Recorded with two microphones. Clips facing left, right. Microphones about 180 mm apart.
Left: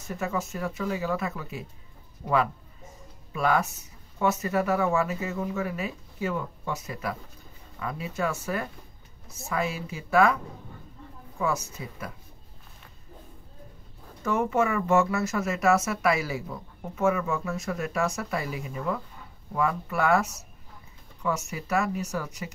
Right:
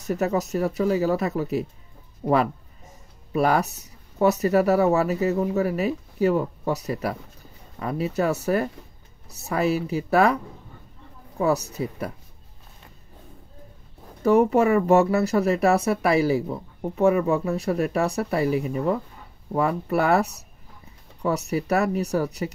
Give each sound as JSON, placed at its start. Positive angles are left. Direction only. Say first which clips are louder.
{"t": 0.2, "sound": "speech", "louder": "right 6 dB", "side_deg": -40}
{"t": 9.5, "sound": "speech", "louder": "right 7 dB", "side_deg": -40}
{"t": 14.2, "sound": "speech", "louder": "right 7 dB", "side_deg": -35}
{"t": 21.8, "sound": "speech", "louder": "right 6 dB", "side_deg": -65}
{"t": 22.1, "sound": "speech", "louder": "right 9 dB", "side_deg": -35}